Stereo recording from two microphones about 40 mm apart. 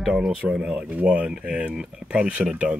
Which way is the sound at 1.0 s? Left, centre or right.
Right.